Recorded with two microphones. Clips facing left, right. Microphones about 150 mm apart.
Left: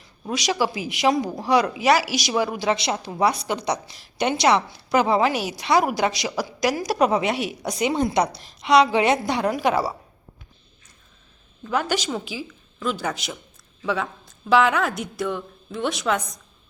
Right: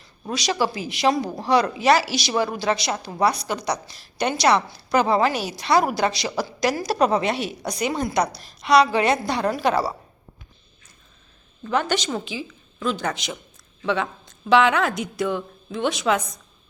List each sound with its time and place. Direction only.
0.0 s a sound: 15° left (ahead or behind)
0.5 s a woman's voice: 10° left (ahead or behind)
3.4 s a woman's voice: 20° left (ahead or behind)
11.6 s a woman's voice: 5° left (ahead or behind)